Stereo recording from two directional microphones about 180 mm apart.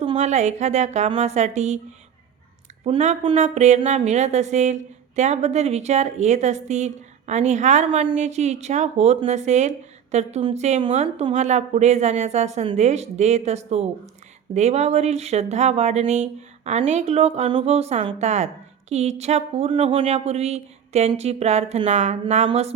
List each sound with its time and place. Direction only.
0.2 s a woman's voice: 40° right (ahead or behind)
2.8 s a woman's voice: 35° right (ahead or behind)